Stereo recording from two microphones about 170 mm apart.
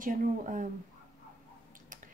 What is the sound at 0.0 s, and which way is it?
Speech, 50° right (ahead or behind).